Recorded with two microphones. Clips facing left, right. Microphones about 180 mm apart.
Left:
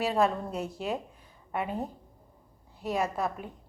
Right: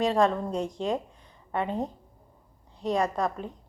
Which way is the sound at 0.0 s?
5° left (ahead or behind).